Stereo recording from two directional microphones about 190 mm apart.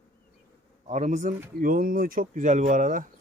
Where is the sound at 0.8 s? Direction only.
40° right (ahead or behind).